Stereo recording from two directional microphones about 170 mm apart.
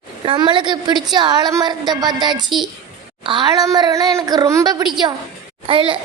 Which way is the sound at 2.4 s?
Centre (ahead or behind).